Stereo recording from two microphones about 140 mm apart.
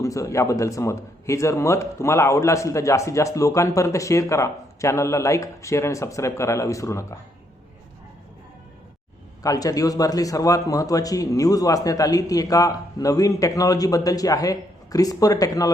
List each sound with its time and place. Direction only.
0.0 s a man's voice: 20° left (ahead or behind)
9.4 s a man's voice: 25° left (ahead or behind)